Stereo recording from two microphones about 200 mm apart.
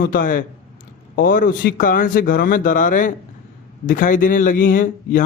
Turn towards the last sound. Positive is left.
turn(degrees=40)  # may be behind; listen again after turning